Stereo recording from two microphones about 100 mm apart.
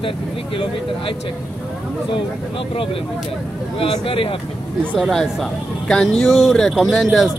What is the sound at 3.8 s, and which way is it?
Speech, 65° left (ahead or behind).